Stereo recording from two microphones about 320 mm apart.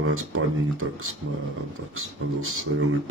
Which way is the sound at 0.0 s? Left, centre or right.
Right.